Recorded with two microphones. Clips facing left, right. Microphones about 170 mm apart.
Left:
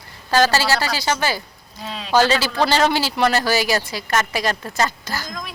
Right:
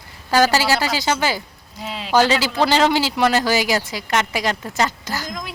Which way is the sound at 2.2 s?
15° right (ahead or behind).